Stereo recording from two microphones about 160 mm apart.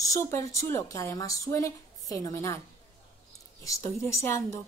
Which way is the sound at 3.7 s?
20° left (ahead or behind).